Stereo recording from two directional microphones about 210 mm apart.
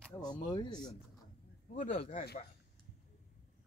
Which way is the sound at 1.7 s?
35° left (ahead or behind).